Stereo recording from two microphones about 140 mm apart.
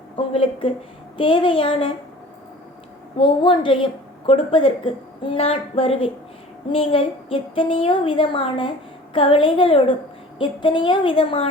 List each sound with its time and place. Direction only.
0.2 s a woman's voice: 40° left (ahead or behind)
3.2 s a woman's voice: 35° left (ahead or behind)